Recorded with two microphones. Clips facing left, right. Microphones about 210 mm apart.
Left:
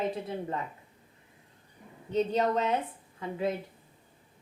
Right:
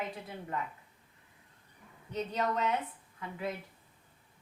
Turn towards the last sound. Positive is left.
turn(degrees=25)  # may be behind; listen again after turning